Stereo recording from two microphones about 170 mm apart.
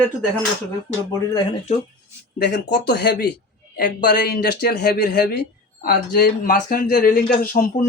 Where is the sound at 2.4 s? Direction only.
75° left (ahead or behind).